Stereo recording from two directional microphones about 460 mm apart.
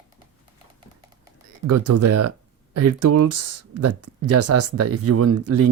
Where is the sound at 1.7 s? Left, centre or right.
Right.